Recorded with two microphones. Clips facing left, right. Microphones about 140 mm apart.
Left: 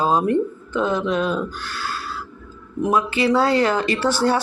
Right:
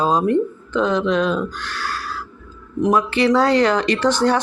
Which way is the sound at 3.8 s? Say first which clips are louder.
Right 3 dB; 5° left (ahead or behind).